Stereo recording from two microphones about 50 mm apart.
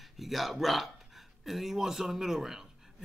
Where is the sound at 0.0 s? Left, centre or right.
Centre.